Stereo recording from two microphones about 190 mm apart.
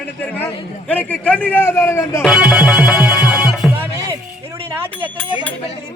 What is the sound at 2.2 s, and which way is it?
Music, 5° right (ahead or behind).